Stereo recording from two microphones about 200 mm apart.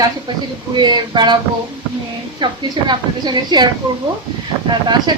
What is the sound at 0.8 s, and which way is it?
Speech, 20° right (ahead or behind).